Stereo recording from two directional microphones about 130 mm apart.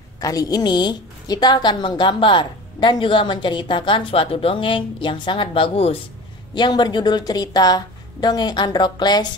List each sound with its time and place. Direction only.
0.2 s a woman's voice: 25° left (ahead or behind)